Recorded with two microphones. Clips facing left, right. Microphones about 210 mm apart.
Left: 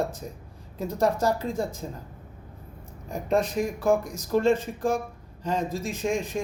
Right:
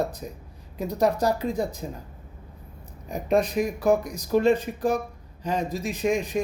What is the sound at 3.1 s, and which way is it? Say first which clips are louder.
Speech: right 2 dB; 15° right (ahead or behind).